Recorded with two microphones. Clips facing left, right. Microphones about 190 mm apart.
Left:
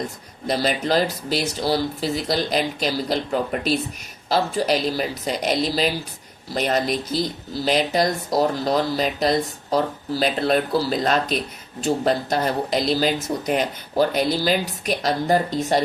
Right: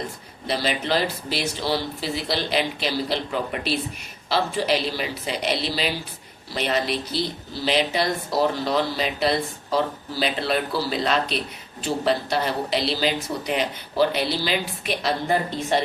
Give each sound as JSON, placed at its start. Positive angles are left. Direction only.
{"t": 0.4, "sound": "speech", "side_deg": 45}